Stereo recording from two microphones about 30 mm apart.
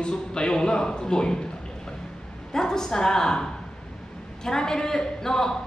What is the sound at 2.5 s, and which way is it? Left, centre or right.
A woman's voice, centre.